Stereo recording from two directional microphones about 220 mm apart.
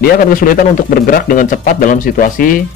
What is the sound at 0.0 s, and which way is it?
A man's voice, 40° left (ahead or behind).